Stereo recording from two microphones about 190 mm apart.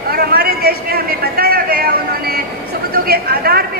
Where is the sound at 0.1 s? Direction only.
55° right (ahead or behind).